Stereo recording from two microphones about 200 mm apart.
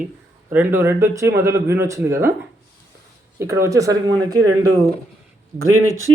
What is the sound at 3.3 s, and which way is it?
Speech, 15° right (ahead or behind).